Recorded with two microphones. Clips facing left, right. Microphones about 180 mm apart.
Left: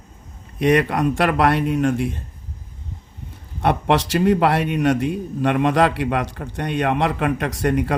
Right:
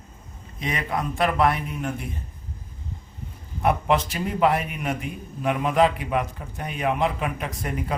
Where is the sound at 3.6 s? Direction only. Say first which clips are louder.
Left 3 dB; 80° left.